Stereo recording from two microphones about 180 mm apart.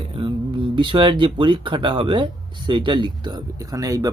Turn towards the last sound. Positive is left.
turn(degrees=-20)  # may be behind; listen again after turning